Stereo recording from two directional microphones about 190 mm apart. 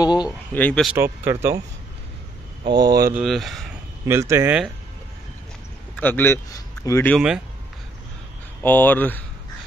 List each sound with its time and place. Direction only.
0.0 s speech: 20° left (ahead or behind)
0.5 s speech: 10° left (ahead or behind)
0.9 s speech: 15° right (ahead or behind)
2.6 s speech: 25° right (ahead or behind)
2.9 s speech: 50° right (ahead or behind)
3.2 s speech: centre (ahead or behind)
4.0 s speech: 15° right (ahead or behind)
5.9 s speech: 10° left (ahead or behind)
7.2 s speech: 5° right (ahead or behind)
8.6 s speech: 10° left (ahead or behind)